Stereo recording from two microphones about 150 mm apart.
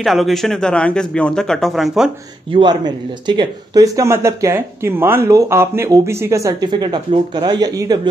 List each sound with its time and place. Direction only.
0.0 s speech: centre (ahead or behind)
2.5 s speech: 30° right (ahead or behind)